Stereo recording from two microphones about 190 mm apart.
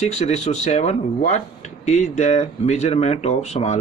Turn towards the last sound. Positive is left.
turn(degrees=35)  # may be behind; listen again after turning